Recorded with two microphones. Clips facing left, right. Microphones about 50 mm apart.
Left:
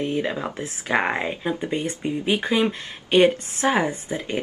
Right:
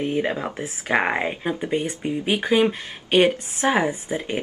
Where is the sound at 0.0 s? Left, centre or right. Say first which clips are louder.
Right 1 dB; right.